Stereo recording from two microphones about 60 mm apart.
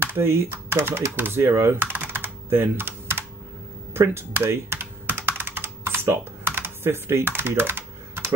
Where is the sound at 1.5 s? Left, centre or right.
Right.